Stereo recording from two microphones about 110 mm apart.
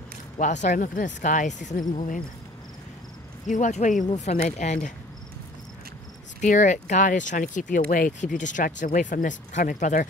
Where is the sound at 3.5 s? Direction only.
90° left.